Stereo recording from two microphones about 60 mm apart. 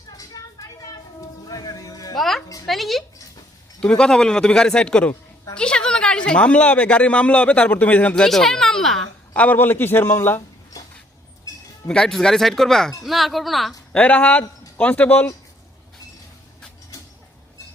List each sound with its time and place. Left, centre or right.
0.4 s vehicle: left
1.5 s music: left
2.1 s music: centre
2.6 s a sound: centre
3.8 s a man's voice: centre
8.1 s a man's voice: centre
9.3 s a man's voice: left
9.6 s a man's voice: left
11.5 s music: left
11.9 s a man's voice: centre
14.0 s a man's voice: left